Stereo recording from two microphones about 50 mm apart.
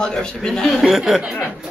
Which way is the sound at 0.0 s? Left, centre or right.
Centre.